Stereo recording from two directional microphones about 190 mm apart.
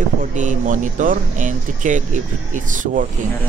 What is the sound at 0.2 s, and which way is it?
Speech, 40° right (ahead or behind).